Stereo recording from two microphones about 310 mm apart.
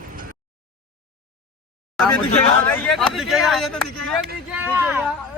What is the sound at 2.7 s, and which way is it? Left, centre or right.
Speech, centre.